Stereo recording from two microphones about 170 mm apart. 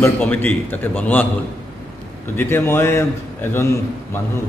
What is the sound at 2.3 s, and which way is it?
A man's voice, 15° left (ahead or behind).